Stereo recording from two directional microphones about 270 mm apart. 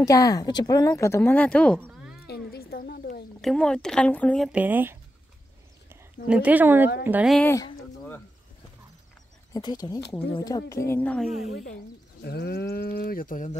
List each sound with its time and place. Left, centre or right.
0.0 s speech: centre
1.8 s a sound: centre
2.2 s a sound: left
3.3 s speech: centre
6.2 s speech: centre
7.1 s bird: centre
9.5 s speech: centre
12.2 s speech: left